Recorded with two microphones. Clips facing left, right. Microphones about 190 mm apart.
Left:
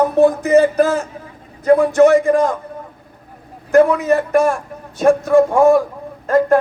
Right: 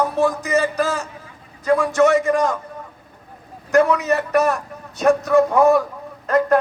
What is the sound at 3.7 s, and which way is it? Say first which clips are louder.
Speech: left 4 dB; 50° left (ahead or behind).